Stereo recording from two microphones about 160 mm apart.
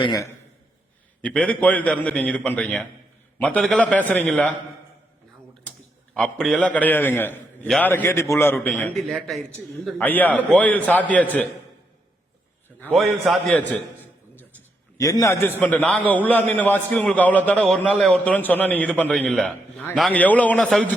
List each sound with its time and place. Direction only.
0.0 s a man's voice: 25° left (ahead or behind)
1.2 s a man's voice: 5° left (ahead or behind)
6.1 s a man's voice: 5° left (ahead or behind)
12.8 s a man's voice: centre (ahead or behind)
13.6 s a sound: 10° left (ahead or behind)
14.9 s a man's voice: 20° left (ahead or behind); by 20.9 s 5° left (ahead or behind)